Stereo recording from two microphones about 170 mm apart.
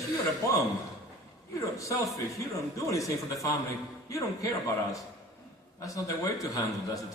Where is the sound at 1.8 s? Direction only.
20° left (ahead or behind).